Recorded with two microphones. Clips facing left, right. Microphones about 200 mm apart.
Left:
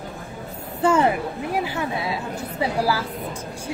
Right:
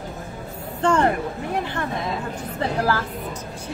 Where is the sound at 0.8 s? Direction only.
5° left (ahead or behind).